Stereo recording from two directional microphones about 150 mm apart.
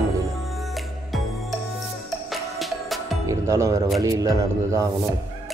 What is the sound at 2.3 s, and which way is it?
Music, centre (ahead or behind).